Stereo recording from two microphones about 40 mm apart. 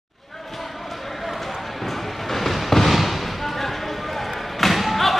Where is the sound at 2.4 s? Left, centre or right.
Centre.